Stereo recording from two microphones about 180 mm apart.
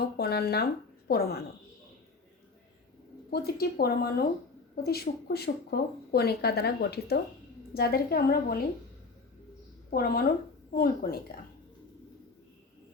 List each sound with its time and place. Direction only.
0.0 s speech: 60° left (ahead or behind)
3.2 s speech: 60° left (ahead or behind)
9.9 s a woman's voice: 55° left (ahead or behind)